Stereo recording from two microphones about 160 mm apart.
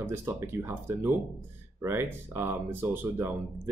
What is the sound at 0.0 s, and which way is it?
Speech, 15° right (ahead or behind).